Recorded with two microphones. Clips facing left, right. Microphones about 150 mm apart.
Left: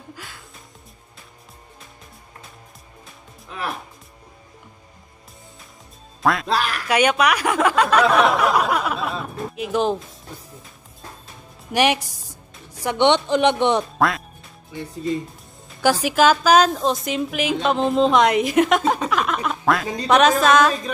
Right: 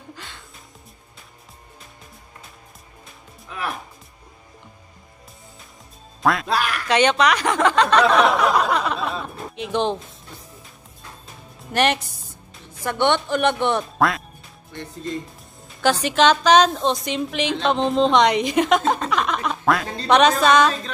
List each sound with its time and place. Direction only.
0.1 s music: 5° left (ahead or behind)
6.2 s speech: centre (ahead or behind)
11.7 s speech: 10° left (ahead or behind)
13.9 s quack: centre (ahead or behind)
14.7 s a woman's voice: 5° left (ahead or behind)